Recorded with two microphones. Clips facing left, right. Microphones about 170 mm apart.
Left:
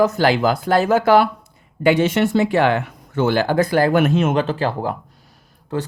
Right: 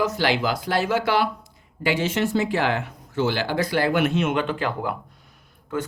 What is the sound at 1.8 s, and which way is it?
Speech, 65° left (ahead or behind).